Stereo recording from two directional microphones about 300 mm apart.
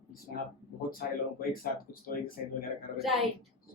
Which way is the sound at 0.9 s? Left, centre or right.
Left.